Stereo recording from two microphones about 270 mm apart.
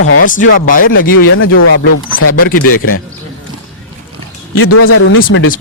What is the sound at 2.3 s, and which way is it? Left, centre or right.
Speech, left.